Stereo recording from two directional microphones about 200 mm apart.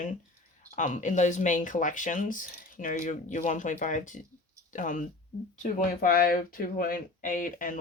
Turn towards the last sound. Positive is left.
turn(degrees=40)  # may be behind; listen again after turning